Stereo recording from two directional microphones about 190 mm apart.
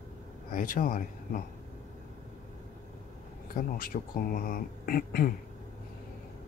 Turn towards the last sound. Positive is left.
turn(degrees=50)  # may be behind; listen again after turning